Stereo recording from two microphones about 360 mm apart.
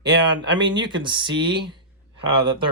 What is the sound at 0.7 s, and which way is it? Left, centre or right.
Speech, centre.